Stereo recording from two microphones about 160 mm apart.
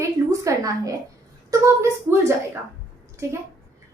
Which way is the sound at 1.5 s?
20° right (ahead or behind).